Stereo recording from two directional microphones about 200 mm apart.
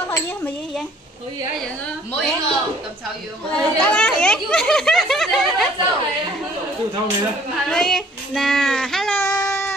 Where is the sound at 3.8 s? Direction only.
5° left (ahead or behind).